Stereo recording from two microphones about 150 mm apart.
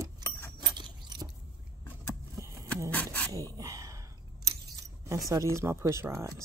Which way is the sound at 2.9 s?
10° left (ahead or behind).